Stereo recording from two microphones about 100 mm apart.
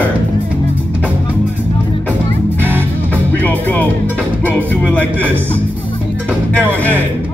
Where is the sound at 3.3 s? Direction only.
15° left (ahead or behind).